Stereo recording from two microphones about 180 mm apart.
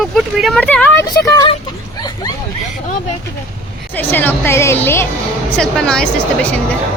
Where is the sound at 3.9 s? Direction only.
10° left (ahead or behind).